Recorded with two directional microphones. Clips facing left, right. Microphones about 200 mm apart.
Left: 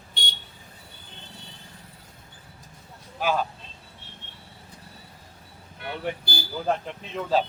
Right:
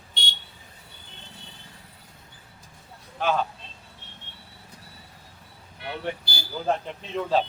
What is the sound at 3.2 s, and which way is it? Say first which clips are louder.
Speech: even; 5° left (ahead or behind).